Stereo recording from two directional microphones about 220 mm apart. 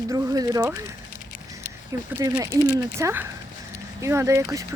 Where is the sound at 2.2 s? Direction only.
15° right (ahead or behind).